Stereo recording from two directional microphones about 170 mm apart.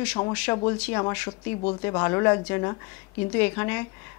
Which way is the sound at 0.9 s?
20° left (ahead or behind).